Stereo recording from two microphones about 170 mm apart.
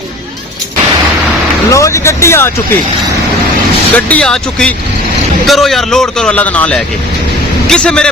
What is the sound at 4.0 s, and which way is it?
A man's voice, 10° left (ahead or behind).